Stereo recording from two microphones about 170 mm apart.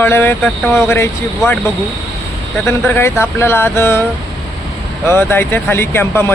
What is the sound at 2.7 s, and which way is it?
Speech, 15° left (ahead or behind).